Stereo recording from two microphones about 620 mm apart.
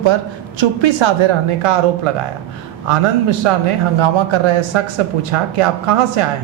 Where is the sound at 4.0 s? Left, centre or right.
Right.